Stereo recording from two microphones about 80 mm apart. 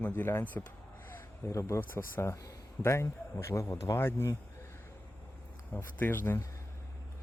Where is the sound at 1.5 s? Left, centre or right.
Left.